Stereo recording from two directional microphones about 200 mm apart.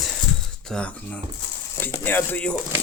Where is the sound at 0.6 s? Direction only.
5° left (ahead or behind).